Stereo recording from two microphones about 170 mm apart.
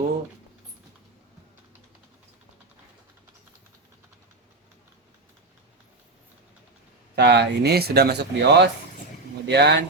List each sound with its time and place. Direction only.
7.2 s speech: 80° right